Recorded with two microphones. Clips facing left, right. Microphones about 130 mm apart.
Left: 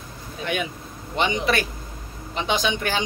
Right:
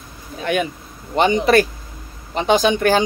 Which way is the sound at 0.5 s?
50° right (ahead or behind).